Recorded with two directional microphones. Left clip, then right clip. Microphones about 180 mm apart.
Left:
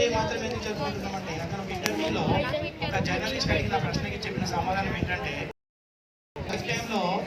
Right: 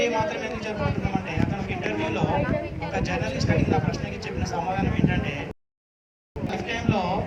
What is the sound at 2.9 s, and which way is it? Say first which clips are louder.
Speech: right 1 dB; 20° right (ahead or behind).